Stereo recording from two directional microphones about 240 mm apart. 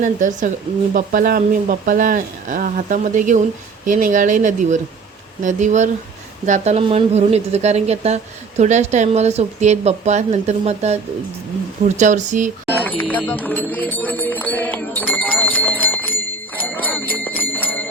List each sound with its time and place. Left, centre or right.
0.0 s a woman's voice: right
12.8 s music: centre
16.6 s jingle bell: centre